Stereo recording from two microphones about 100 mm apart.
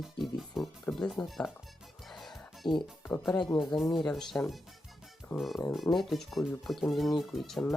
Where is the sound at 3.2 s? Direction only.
5° left (ahead or behind).